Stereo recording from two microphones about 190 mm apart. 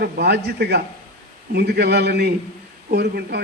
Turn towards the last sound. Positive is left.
turn(degrees=-60)  # may be behind; listen again after turning